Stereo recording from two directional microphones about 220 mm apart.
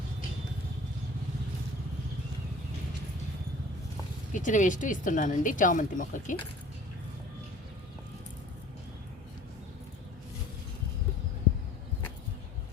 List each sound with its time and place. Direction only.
4.3 s speech: 35° left (ahead or behind)